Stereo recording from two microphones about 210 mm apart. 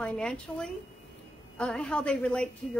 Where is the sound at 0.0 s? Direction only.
5° left (ahead or behind).